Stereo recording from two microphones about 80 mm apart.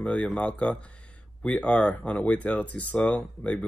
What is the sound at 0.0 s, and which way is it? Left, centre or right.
Speech, centre.